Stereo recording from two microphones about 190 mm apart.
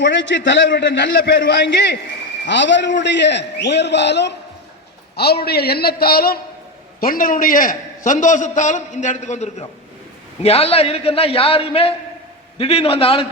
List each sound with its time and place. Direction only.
0.0 s a man's voice: 70° left (ahead or behind); by 13.2 s 30° left (ahead or behind)